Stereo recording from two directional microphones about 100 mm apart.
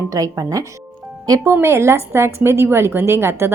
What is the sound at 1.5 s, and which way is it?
A woman's voice, 25° right (ahead or behind).